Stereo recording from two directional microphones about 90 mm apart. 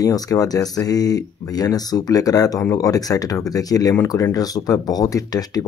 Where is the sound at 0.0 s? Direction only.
40° left (ahead or behind).